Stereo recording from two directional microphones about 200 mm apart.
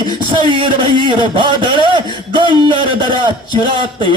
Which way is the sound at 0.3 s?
25° right (ahead or behind).